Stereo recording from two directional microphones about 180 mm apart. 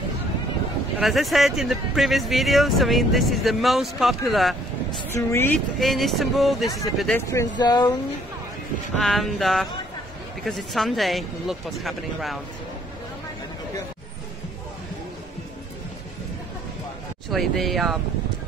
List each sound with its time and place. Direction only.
0.9 s speech: centre (ahead or behind)
5.1 s a woman's voice: 15° left (ahead or behind)
5.8 s speech: centre (ahead or behind)
7.2 s speech: 15° left (ahead or behind)
8.9 s speech: centre (ahead or behind)
17.3 s speech: centre (ahead or behind)